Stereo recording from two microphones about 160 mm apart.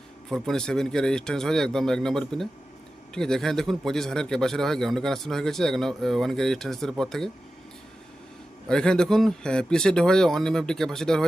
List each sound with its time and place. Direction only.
0.3 s a man's voice: centre (ahead or behind)
8.7 s a man's voice: 5° left (ahead or behind)